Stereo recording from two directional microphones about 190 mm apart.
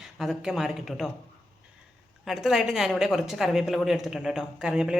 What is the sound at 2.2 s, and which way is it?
A woman's voice, centre (ahead or behind).